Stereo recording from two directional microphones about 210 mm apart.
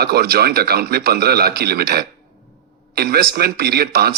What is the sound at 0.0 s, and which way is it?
Speech, 50° right (ahead or behind).